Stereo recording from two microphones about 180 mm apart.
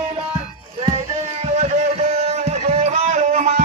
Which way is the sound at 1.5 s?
40° right (ahead or behind).